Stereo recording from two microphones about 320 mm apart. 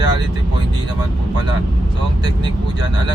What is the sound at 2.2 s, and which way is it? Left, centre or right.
Speech, centre.